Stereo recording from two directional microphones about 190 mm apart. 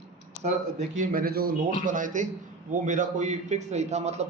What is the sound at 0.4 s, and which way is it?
A man's voice, 40° right (ahead or behind).